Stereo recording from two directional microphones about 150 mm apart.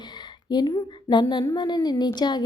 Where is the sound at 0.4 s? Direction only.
25° left (ahead or behind).